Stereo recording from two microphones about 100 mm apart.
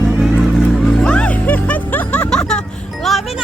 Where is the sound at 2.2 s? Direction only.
5° left (ahead or behind).